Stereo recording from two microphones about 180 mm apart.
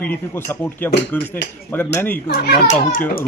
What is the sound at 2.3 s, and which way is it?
Speech, 60° left (ahead or behind).